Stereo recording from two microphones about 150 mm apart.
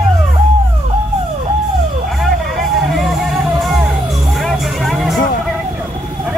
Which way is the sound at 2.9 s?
Centre (ahead or behind).